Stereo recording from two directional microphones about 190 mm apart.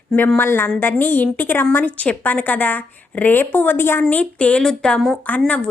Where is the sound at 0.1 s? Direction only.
5° left (ahead or behind).